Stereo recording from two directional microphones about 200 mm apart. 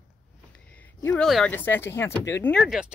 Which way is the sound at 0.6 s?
5° left (ahead or behind).